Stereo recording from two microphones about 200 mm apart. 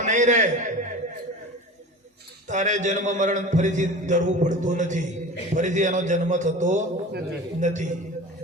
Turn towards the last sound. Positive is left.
turn(degrees=-35)  # may be behind; listen again after turning